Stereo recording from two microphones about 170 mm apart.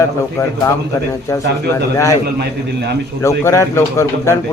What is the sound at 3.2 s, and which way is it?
A man's voice, 15° left (ahead or behind).